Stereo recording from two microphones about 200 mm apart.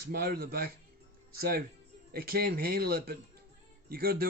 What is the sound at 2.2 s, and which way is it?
A man's voice, 50° right (ahead or behind).